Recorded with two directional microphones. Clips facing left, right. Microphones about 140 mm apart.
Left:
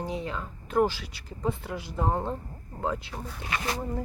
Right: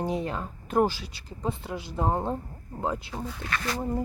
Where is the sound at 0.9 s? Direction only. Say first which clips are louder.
Right 1 dB; 35° right (ahead or behind).